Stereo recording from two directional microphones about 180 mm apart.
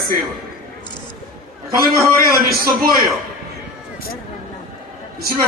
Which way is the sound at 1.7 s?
55° right (ahead or behind).